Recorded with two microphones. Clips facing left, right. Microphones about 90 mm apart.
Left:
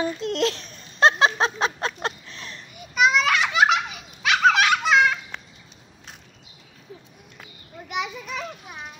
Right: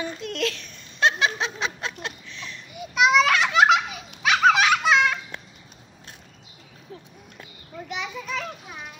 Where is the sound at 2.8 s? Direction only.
Centre (ahead or behind).